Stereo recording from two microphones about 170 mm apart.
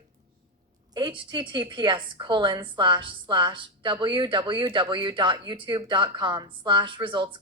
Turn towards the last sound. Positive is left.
turn(degrees=-30)  # may be behind; listen again after turning